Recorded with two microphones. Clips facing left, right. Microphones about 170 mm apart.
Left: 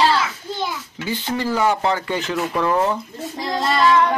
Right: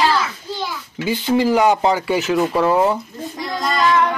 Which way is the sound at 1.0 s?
15° right (ahead or behind).